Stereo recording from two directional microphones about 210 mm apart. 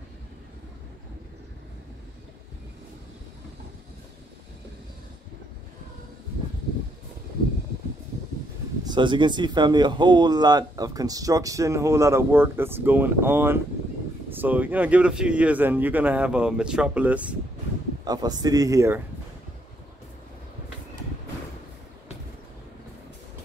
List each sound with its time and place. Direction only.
8.8 s speech: 20° right (ahead or behind); by 17.4 s 5° right (ahead or behind)
18.0 s speech: 20° right (ahead or behind)